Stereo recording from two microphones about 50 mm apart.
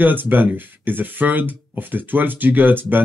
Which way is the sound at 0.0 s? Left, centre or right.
Right.